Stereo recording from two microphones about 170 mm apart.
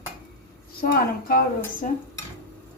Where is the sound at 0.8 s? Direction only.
60° left (ahead or behind).